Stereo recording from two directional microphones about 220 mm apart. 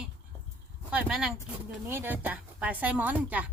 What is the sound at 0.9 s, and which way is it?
A woman's voice, 5° right (ahead or behind).